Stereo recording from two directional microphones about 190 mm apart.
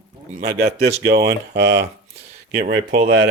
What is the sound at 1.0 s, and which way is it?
Speech, 55° right (ahead or behind).